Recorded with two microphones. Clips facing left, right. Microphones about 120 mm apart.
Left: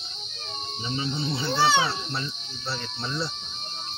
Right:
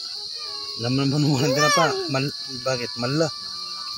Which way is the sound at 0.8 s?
65° right (ahead or behind).